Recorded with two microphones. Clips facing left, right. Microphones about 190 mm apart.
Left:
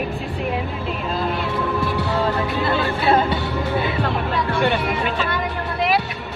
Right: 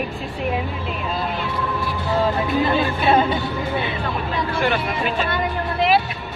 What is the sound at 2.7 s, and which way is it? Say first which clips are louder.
Speech: left 2 dB; 20° right (ahead or behind).